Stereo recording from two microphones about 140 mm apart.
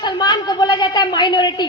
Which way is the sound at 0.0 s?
30° left (ahead or behind).